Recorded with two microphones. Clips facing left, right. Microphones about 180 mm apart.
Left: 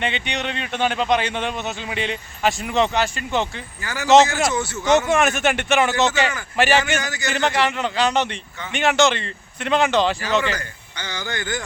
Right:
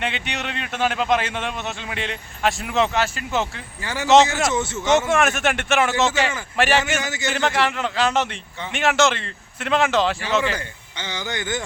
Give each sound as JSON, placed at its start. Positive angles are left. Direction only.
{"t": 0.0, "sound": "a man's voice", "side_deg": 0}
{"t": 3.8, "sound": "speech", "side_deg": -25}
{"t": 4.8, "sound": "a man's voice", "side_deg": 0}
{"t": 7.0, "sound": "speech", "side_deg": -25}
{"t": 7.3, "sound": "a man's voice", "side_deg": 0}
{"t": 10.6, "sound": "speech", "side_deg": -20}